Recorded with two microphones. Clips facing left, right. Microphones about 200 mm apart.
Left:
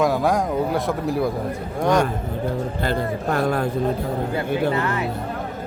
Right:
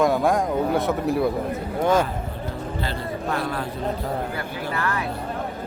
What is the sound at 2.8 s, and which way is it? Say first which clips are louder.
Speech: left 5 dB; 50° left (ahead or behind).